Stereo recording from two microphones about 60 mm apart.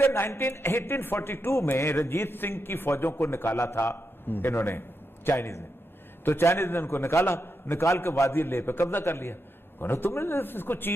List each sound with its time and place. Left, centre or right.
0.0 s a man's voice: left
1.7 s a man's voice: left
7.8 s a man's voice: left